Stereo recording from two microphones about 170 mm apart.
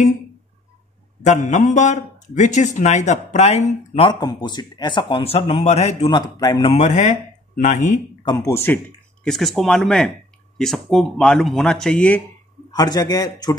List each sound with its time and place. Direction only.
1.2 s speech: 45° left (ahead or behind)
4.2 s speech: 25° left (ahead or behind)
6.7 s speech: 45° left (ahead or behind)
8.5 s speech: 15° left (ahead or behind)
12.7 s speech: 25° left (ahead or behind)